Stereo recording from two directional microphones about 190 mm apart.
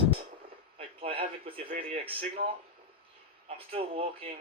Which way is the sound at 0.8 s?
30° right (ahead or behind).